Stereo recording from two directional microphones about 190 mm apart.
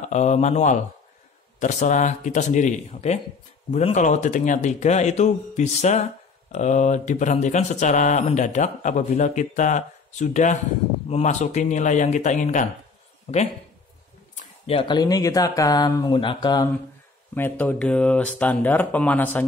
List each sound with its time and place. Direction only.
0.1 s speech: 40° left (ahead or behind); by 16.7 s 20° left (ahead or behind)
17.3 s speech: 10° left (ahead or behind)